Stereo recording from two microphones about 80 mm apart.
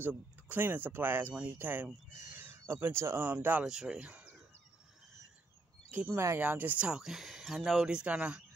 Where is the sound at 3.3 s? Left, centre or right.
Right.